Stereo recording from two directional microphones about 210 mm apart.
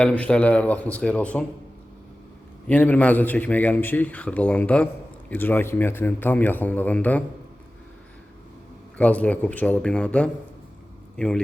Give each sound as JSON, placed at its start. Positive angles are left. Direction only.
{"t": 0.0, "sound": "a man's voice", "side_deg": 5}
{"t": 2.6, "sound": "a man's voice", "side_deg": 5}
{"t": 9.0, "sound": "a man's voice", "side_deg": 5}